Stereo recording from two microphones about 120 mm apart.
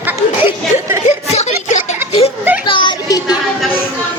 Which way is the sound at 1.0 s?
75° left (ahead or behind).